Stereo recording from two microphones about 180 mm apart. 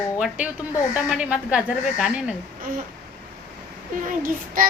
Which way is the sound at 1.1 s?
5° right (ahead or behind).